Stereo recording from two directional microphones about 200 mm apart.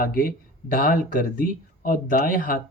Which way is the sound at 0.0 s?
45° left (ahead or behind).